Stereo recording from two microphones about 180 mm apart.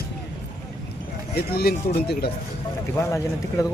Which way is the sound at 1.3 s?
60° left (ahead or behind).